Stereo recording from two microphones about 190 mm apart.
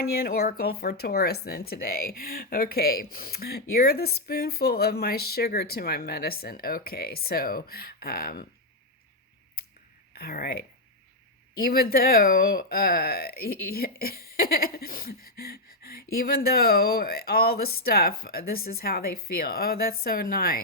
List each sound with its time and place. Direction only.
0.0 s speech: 50° left (ahead or behind)
10.2 s speech: 55° left (ahead or behind)